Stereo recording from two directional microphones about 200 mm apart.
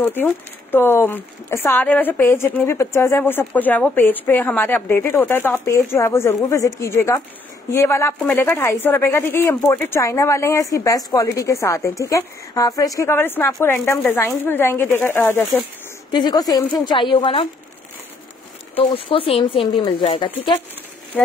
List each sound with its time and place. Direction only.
0.0 s speech: 10° left (ahead or behind)
16.1 s a woman's voice: 20° left (ahead or behind)
18.8 s a woman's voice: 25° left (ahead or behind)